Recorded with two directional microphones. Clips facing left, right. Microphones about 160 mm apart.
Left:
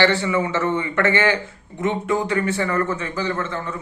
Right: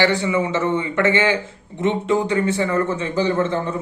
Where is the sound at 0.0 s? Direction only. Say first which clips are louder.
Even; 15° right (ahead or behind).